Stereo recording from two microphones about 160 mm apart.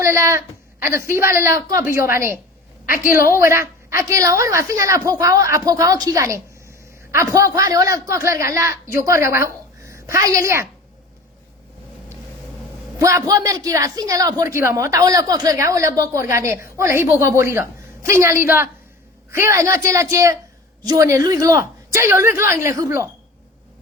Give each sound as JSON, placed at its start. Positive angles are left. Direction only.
{"t": 0.0, "sound": "a woman's voice", "side_deg": -20}
{"t": 13.0, "sound": "a woman's voice", "side_deg": -20}